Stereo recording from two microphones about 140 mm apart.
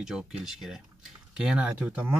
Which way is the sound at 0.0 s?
5° right (ahead or behind).